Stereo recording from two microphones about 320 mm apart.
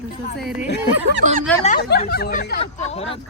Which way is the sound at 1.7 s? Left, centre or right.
Left.